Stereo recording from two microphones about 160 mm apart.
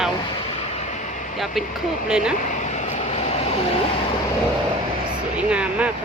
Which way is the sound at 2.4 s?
50° left (ahead or behind).